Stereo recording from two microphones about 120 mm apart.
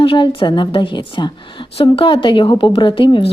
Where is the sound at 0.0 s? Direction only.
45° left (ahead or behind).